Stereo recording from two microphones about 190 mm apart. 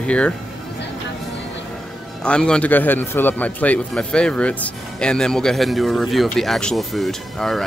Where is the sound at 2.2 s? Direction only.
5° left (ahead or behind).